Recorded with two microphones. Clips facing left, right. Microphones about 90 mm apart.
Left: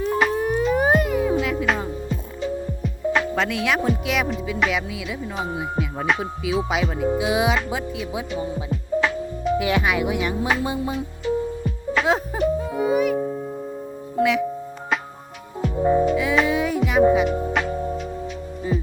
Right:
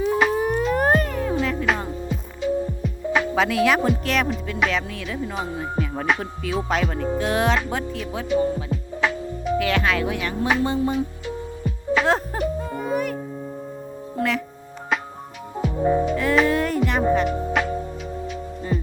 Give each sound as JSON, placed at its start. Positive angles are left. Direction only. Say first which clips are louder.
{"t": 0.0, "sound": "music", "louder": "right 1 dB", "side_deg": -5}
{"t": 2.8, "sound": "speech", "louder": "even", "side_deg": 0}
{"t": 8.7, "sound": "music", "louder": "left 2 dB", "side_deg": 0}
{"t": 9.6, "sound": "music", "louder": "right 1 dB", "side_deg": 15}
{"t": 10.8, "sound": "speech", "louder": "right 4 dB", "side_deg": 0}
{"t": 11.6, "sound": "music", "louder": "right 1 dB", "side_deg": 0}
{"t": 14.2, "sound": "a child's voice", "louder": "left 4 dB", "side_deg": 5}
{"t": 15.6, "sound": "music", "louder": "left 2 dB", "side_deg": 0}
{"t": 18.7, "sound": "music", "louder": "even", "side_deg": 0}